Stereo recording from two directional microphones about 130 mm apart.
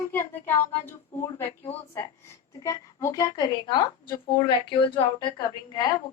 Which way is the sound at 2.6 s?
25° left (ahead or behind).